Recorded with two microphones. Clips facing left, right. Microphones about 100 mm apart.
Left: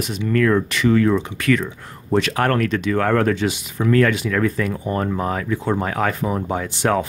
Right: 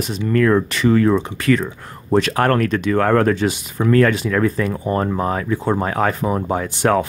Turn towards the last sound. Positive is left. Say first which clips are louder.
# right 3 dB
turn(degrees=-50)  # may be behind; listen again after turning